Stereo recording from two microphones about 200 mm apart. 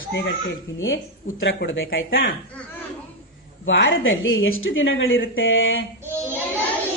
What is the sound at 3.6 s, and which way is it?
A woman's voice, 75° left (ahead or behind).